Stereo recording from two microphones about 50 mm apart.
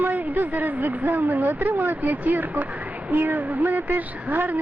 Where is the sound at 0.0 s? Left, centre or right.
Right.